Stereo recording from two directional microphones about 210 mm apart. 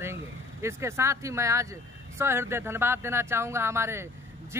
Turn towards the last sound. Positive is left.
turn(degrees=-10)  # may be behind; listen again after turning